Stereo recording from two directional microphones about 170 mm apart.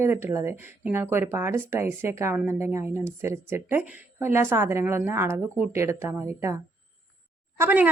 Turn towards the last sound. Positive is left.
turn(degrees=-10)  # may be behind; listen again after turning